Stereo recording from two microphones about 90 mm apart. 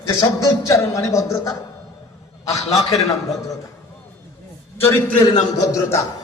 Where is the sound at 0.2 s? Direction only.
40° left (ahead or behind).